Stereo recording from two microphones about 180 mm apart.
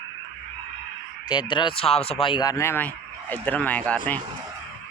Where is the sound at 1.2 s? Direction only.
25° left (ahead or behind); by 4.2 s 5° left (ahead or behind).